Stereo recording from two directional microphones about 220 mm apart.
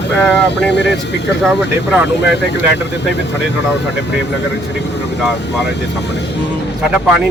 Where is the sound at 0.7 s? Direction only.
50° left (ahead or behind).